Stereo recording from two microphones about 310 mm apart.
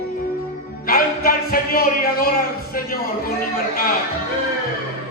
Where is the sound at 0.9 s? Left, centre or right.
Left.